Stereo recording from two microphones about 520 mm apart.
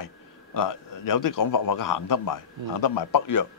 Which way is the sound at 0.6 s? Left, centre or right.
Left.